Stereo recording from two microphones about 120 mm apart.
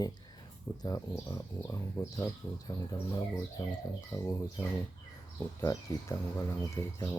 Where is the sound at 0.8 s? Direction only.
30° left (ahead or behind).